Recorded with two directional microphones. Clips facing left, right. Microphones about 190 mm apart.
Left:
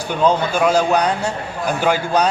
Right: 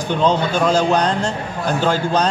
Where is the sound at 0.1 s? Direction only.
10° left (ahead or behind).